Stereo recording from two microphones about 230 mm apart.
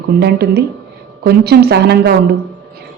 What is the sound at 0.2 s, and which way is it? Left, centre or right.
Speech, right.